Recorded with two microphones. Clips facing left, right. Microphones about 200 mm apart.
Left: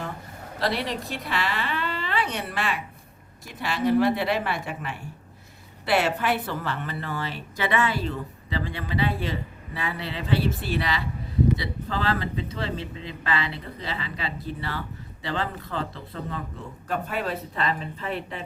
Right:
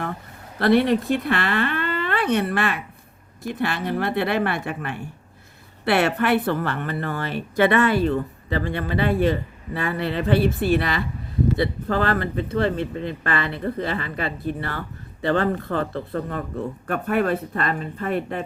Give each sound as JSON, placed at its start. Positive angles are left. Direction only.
{"t": 0.6, "sound": "speech", "side_deg": -55}